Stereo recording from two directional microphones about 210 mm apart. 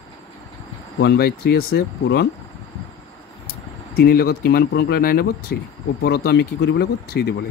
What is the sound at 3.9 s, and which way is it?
Speech, 45° left (ahead or behind).